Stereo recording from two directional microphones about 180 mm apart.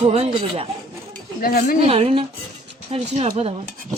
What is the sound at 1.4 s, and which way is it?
Speech, 55° left (ahead or behind).